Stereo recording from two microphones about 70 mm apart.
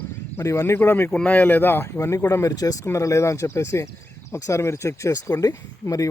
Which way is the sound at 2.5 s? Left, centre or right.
Left.